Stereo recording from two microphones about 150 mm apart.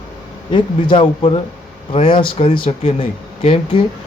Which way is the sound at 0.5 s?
35° left (ahead or behind).